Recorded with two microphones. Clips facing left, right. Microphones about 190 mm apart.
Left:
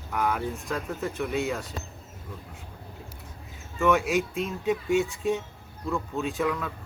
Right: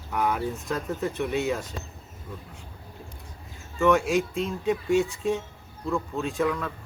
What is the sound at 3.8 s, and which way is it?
Speech, centre (ahead or behind).